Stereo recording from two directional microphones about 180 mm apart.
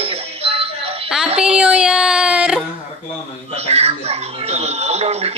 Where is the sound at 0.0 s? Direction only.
35° right (ahead or behind).